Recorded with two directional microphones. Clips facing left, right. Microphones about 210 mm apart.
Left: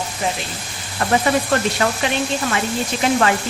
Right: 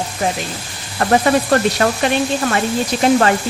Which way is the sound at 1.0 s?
45° right (ahead or behind).